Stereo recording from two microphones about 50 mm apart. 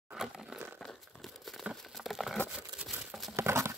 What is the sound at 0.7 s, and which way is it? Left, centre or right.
Crumpling, centre.